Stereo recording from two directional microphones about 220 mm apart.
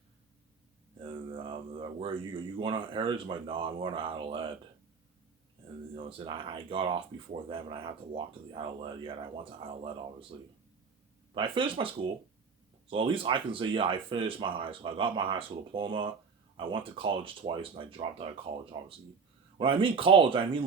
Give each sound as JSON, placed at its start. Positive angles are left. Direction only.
{"t": 1.0, "sound": "speech", "side_deg": -25}
{"t": 6.0, "sound": "speech", "side_deg": -25}
{"t": 11.3, "sound": "speech", "side_deg": -25}
{"t": 12.9, "sound": "speech", "side_deg": -25}